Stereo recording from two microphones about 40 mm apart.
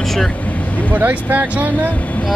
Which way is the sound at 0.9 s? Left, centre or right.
Right.